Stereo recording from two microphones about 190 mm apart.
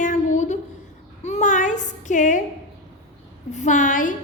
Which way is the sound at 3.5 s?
40° left (ahead or behind).